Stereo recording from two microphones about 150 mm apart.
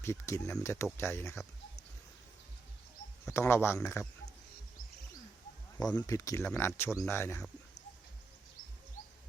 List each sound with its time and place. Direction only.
0.0 s speech: 20° left (ahead or behind)
3.2 s speech: 15° left (ahead or behind)
6.0 s speech: 20° left (ahead or behind)